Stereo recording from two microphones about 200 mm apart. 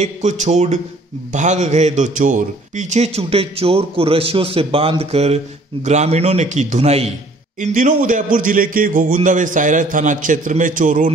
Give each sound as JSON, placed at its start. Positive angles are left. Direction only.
{"t": 0.0, "sound": "a man's voice", "side_deg": -35}